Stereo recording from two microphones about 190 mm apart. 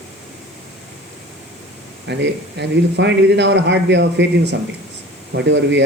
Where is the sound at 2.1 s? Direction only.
65° right (ahead or behind).